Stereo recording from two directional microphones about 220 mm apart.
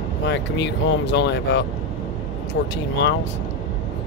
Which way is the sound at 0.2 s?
55° left (ahead or behind).